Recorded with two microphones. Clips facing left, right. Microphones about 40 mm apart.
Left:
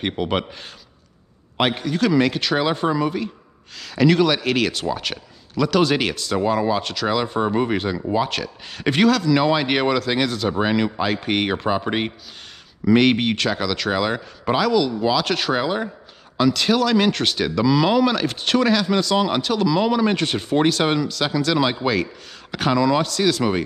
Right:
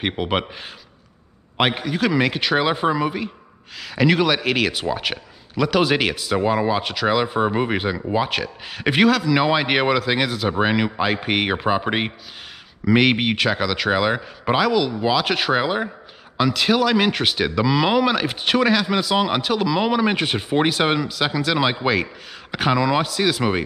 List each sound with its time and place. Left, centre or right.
0.0 s speech: centre
1.6 s speech: centre